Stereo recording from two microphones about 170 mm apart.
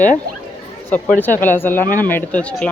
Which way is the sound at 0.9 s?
10° left (ahead or behind).